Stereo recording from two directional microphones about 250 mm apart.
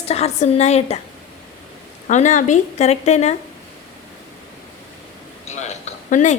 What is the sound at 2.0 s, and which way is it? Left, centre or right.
A woman's voice, left.